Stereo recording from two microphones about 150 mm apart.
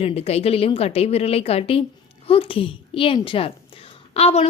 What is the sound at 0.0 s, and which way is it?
Speech, 40° left (ahead or behind).